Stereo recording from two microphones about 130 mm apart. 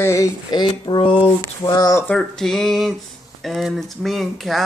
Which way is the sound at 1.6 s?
30° left (ahead or behind).